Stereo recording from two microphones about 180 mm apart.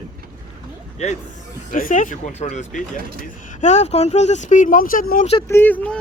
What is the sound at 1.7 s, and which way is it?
Speech, 45° left (ahead or behind).